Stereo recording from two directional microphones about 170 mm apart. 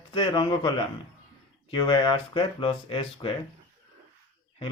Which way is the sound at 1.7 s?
30° left (ahead or behind).